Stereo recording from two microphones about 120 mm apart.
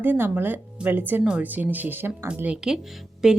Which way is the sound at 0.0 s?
15° right (ahead or behind).